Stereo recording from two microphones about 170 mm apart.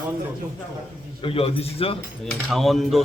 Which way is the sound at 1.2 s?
35° left (ahead or behind).